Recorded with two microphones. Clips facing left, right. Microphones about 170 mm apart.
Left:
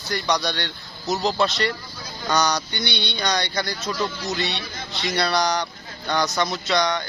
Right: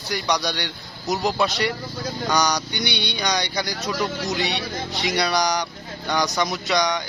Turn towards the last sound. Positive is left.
turn(degrees=-15)  # may be behind; listen again after turning